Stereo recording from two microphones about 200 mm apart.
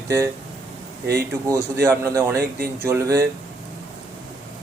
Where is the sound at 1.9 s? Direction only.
15° right (ahead or behind).